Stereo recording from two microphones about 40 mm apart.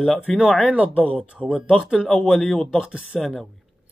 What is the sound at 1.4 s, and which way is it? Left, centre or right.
Speech, centre.